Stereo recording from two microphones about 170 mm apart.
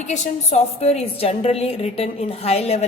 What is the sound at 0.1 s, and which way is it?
A woman's voice, 40° left (ahead or behind).